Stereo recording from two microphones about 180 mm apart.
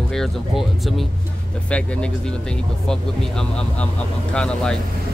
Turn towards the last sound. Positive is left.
turn(degrees=5)  # may be behind; listen again after turning